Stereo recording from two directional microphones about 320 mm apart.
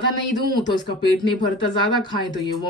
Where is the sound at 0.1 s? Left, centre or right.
Centre.